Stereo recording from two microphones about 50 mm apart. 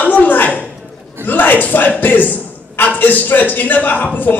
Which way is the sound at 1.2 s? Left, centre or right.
Left.